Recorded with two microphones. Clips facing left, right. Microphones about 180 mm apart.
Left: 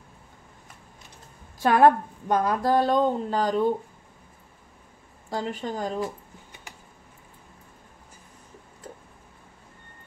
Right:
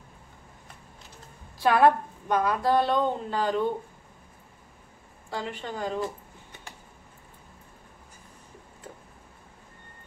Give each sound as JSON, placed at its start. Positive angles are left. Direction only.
{"t": 1.6, "sound": "a woman's voice", "side_deg": 45}
{"t": 5.3, "sound": "a woman's voice", "side_deg": 40}